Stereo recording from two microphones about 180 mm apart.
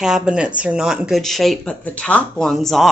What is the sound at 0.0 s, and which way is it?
Speech, 5° right (ahead or behind).